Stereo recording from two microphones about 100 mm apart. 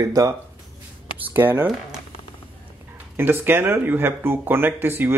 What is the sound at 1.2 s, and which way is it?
Speech, 20° right (ahead or behind).